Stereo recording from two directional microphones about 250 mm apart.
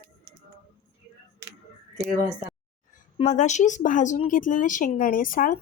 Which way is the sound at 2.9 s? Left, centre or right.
Left.